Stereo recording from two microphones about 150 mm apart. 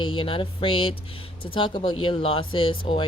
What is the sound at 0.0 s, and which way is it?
Speech, 35° left (ahead or behind).